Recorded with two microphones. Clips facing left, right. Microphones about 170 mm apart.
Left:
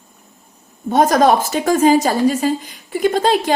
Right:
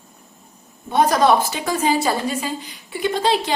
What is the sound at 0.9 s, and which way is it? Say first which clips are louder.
A woman's voice: left 3 dB; 45° left (ahead or behind).